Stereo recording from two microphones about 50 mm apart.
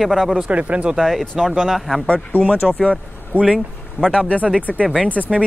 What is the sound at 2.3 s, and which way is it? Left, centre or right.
Speech, left.